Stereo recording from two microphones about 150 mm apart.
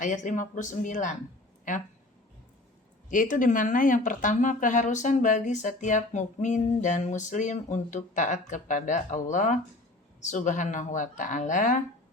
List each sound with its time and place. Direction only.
0.0 s speech: 55° left (ahead or behind)
3.1 s speech: 60° left (ahead or behind)